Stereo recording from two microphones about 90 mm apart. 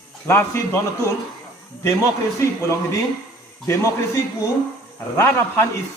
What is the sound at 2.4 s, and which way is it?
Speech, 30° left (ahead or behind).